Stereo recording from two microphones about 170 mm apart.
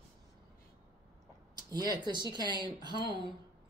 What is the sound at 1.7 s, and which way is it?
A woman's voice, 25° right (ahead or behind).